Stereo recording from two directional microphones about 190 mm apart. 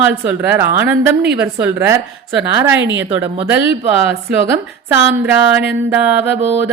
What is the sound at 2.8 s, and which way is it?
Speech, 70° right (ahead or behind).